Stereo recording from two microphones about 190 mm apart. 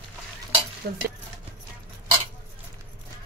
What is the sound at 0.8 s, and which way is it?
Speech, 55° right (ahead or behind).